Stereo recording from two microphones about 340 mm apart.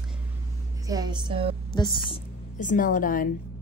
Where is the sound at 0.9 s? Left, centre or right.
Centre.